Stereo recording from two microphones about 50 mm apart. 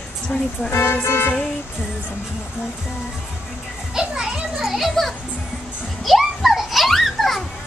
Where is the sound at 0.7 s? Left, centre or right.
Left.